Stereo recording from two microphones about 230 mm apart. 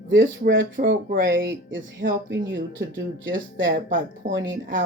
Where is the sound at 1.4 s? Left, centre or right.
Right.